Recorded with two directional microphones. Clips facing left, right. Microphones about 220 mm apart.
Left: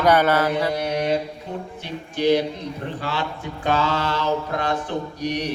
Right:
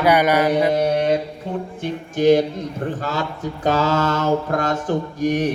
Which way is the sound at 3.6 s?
40° right (ahead or behind).